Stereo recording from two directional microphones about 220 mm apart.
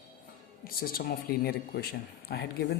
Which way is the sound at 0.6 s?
40° left (ahead or behind).